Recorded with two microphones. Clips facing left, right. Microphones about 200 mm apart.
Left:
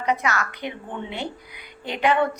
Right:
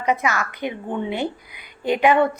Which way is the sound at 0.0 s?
15° right (ahead or behind).